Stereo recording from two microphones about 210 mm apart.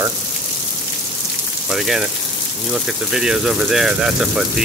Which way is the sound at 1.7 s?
Centre (ahead or behind).